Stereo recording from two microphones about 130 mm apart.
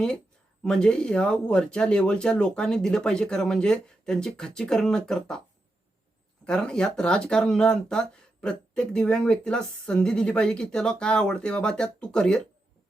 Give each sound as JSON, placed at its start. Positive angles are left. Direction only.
{"t": 0.6, "sound": "speech", "side_deg": 5}
{"t": 6.4, "sound": "speech", "side_deg": 5}